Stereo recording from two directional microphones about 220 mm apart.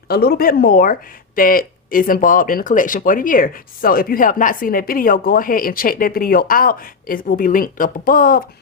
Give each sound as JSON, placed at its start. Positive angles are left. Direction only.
{"t": 0.1, "sound": "speech", "side_deg": 45}